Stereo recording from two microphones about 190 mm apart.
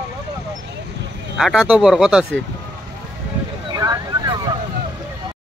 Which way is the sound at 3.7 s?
20° right (ahead or behind).